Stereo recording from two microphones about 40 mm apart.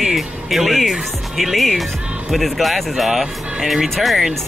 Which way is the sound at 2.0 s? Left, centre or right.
Right.